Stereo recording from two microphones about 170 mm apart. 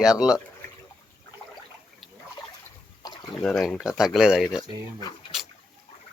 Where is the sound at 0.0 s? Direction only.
5° right (ahead or behind).